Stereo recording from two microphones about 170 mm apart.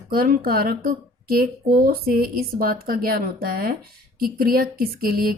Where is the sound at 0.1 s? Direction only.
60° right (ahead or behind).